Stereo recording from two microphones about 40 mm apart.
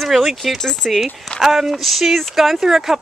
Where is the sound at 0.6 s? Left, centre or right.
Centre.